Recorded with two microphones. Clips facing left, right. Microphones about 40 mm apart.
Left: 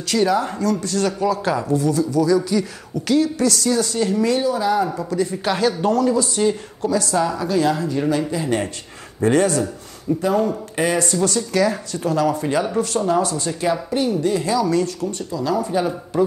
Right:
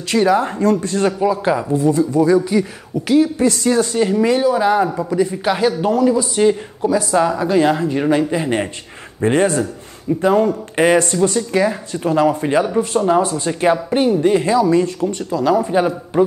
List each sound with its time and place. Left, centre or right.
0.1 s speech: right
3.1 s speech: centre
3.4 s speech: right
4.8 s speech: centre; by 11.1 s right
11.1 s speech: right